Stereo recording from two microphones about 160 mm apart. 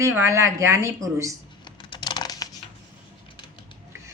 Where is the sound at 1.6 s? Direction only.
30° left (ahead or behind).